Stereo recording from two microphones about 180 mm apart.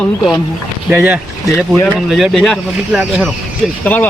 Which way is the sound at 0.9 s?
10° right (ahead or behind).